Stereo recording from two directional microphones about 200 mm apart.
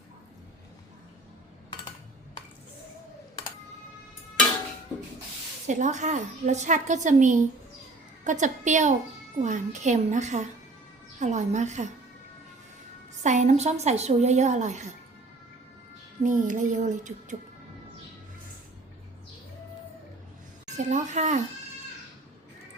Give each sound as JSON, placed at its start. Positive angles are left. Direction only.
{"t": 5.6, "sound": "a woman's voice", "side_deg": -35}
{"t": 13.2, "sound": "a woman's voice", "side_deg": -35}
{"t": 16.2, "sound": "a woman's voice", "side_deg": -40}
{"t": 20.7, "sound": "a woman's voice", "side_deg": -35}